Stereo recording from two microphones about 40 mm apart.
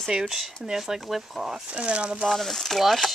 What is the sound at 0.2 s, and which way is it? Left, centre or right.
Speech, centre.